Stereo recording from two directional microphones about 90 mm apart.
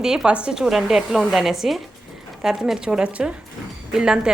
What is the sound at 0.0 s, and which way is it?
A woman's voice, 5° right (ahead or behind).